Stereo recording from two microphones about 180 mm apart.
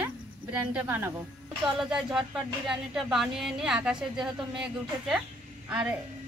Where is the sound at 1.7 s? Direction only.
5° right (ahead or behind).